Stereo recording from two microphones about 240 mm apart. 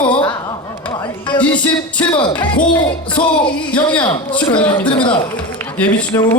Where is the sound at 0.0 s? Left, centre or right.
Centre.